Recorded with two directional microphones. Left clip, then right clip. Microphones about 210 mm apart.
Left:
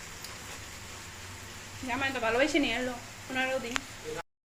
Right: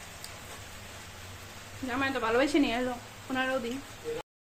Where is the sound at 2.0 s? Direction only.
15° right (ahead or behind).